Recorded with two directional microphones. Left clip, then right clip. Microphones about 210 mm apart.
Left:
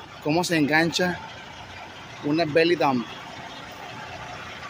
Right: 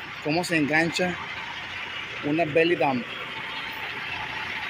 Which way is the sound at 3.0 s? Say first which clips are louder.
Right 3 dB; 60° left (ahead or behind).